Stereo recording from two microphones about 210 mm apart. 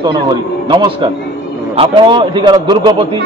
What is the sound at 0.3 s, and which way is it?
A man's voice, 20° right (ahead or behind).